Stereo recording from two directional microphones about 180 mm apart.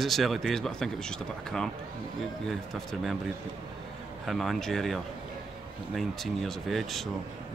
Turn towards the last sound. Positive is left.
turn(degrees=0)  # may be behind; listen again after turning